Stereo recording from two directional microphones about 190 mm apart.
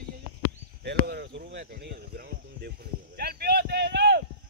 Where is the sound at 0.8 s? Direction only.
60° right (ahead or behind).